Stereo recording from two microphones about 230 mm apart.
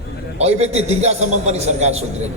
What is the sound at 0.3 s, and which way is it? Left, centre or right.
A man's voice, right.